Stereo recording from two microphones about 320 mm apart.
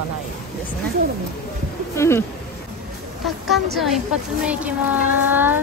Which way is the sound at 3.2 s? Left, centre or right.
Centre.